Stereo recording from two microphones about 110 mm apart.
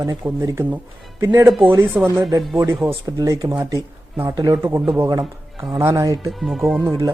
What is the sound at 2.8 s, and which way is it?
Speech, 35° right (ahead or behind).